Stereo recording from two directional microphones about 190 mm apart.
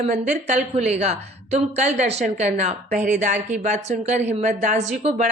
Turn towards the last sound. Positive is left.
turn(degrees=-35)  # may be behind; listen again after turning